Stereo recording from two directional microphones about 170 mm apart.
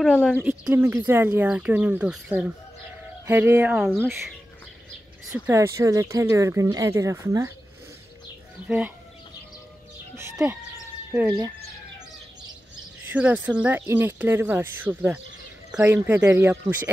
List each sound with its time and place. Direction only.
0.0 s speech: 5° left (ahead or behind)
0.3 s speech: 10° right (ahead or behind)
5.3 s speech: 20° right (ahead or behind)
8.6 s speech: 10° right (ahead or behind)
10.1 s speech: 15° right (ahead or behind)
13.0 s speech: 10° right (ahead or behind)